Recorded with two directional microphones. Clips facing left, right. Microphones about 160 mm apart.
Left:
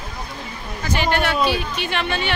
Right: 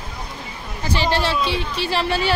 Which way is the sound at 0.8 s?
30° right (ahead or behind).